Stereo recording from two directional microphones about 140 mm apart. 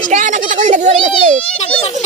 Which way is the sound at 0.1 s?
65° right (ahead or behind).